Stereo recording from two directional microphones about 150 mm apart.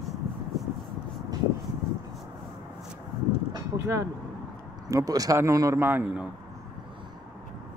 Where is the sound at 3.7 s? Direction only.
20° right (ahead or behind).